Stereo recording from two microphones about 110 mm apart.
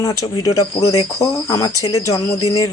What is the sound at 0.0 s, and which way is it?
Speech, 35° left (ahead or behind).